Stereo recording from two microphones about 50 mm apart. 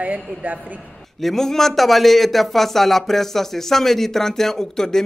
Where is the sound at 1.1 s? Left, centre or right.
Centre.